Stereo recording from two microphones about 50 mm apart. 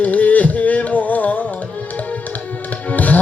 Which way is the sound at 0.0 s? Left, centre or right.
Left.